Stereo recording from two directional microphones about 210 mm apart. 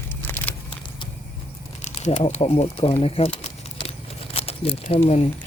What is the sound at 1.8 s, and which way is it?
Speech, 35° left (ahead or behind).